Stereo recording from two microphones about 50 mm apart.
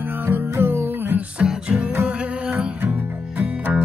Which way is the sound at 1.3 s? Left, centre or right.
Right.